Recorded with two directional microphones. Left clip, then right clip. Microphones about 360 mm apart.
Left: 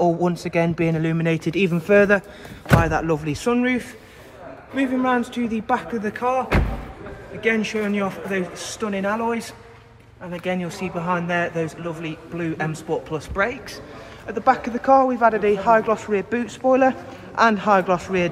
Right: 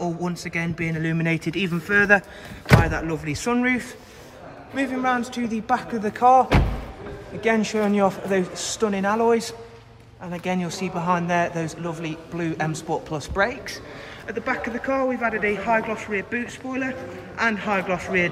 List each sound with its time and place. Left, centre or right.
0.0 s a man's voice: centre
16.1 s speech: left
17.4 s speech: centre